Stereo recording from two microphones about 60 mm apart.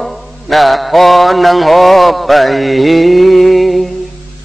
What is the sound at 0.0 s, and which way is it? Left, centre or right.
Mantra, centre.